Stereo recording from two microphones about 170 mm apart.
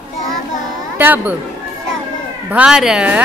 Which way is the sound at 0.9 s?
10° right (ahead or behind).